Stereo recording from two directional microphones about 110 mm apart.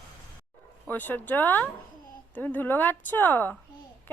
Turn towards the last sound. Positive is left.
turn(degrees=15)  # may be behind; listen again after turning